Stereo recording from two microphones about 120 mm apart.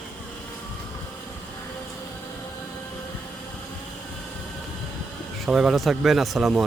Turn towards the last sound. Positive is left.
turn(degrees=0)  # may be behind; listen again after turning